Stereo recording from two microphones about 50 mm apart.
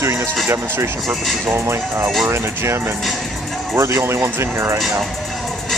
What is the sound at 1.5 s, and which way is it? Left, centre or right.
Speech, right.